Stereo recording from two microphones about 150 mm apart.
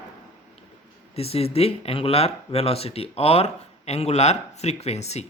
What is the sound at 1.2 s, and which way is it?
Speech, 40° left (ahead or behind).